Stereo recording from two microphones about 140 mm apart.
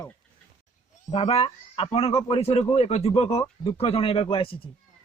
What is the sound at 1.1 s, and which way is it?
Speech, 50° left (ahead or behind).